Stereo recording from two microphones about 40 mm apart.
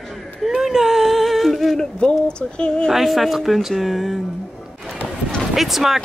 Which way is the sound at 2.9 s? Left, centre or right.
Centre.